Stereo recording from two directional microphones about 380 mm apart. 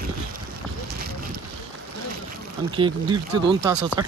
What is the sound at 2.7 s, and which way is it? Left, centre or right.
Speech, centre.